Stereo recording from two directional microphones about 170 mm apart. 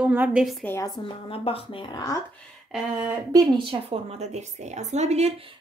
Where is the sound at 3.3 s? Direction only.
30° right (ahead or behind).